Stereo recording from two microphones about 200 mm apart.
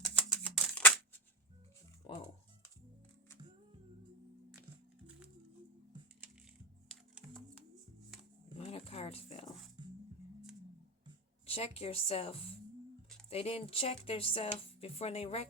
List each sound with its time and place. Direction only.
0.0 s music: 5° left (ahead or behind)
2.1 s music: 30° left (ahead or behind)
8.5 s a sound: 30° left (ahead or behind)
9.8 s music: 20° right (ahead or behind)
11.4 s speech: 30° left (ahead or behind)